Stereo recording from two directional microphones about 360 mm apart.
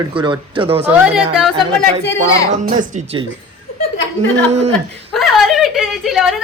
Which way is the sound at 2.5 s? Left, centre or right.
Right.